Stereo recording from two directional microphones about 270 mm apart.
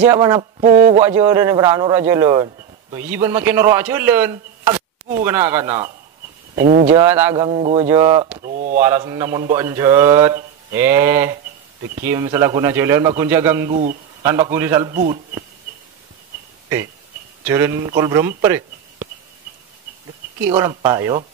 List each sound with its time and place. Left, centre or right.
0.0 s a man's voice: centre
1.0 s a man's voice: centre
6.6 s a man's voice: right
7.1 s a man's voice: centre
7.3 s a man's voice: centre
8.4 s a man's voice: right
8.7 s a man's voice: centre
13.7 s a man's voice: right
14.9 s a man's voice: right
17.5 s a man's voice: centre
20.4 s a man's voice: centre